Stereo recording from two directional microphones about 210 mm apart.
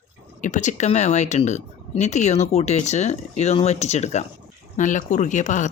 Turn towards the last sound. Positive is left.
turn(degrees=35)  # may be behind; listen again after turning